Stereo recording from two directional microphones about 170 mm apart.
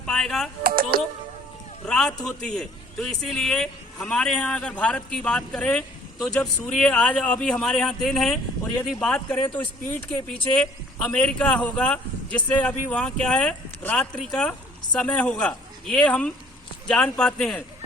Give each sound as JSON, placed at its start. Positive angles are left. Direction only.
{"t": 0.0, "sound": "speech", "side_deg": 5}
{"t": 0.6, "sound": "speech", "side_deg": -60}
{"t": 1.9, "sound": "a man's voice", "side_deg": 5}
{"t": 10.6, "sound": "a man's voice", "side_deg": 5}